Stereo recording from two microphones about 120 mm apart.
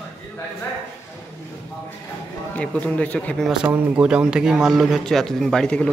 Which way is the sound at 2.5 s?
10° left (ahead or behind).